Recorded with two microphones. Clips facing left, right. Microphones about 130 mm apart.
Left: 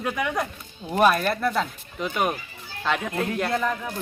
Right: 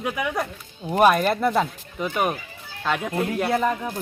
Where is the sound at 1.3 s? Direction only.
20° right (ahead or behind).